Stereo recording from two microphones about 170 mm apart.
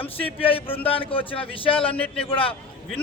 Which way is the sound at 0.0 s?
30° left (ahead or behind).